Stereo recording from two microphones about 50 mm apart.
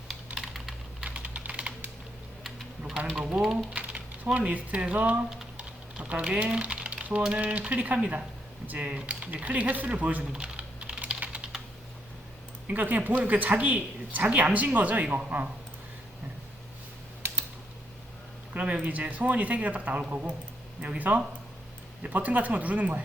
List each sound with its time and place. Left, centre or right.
0.3 s typing: centre
1.2 s computer keyboard: right
2.4 s a sound: centre
3.2 s speech: centre
3.8 s speech: right
5.5 s typing: right
7.2 s speech: centre
10.3 s typing: centre
11.2 s computer keyboard: right
12.6 s speech: right
18.5 s speech: right
22.0 s speech: right